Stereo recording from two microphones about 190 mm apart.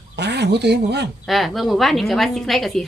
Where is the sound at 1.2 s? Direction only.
Centre (ahead or behind).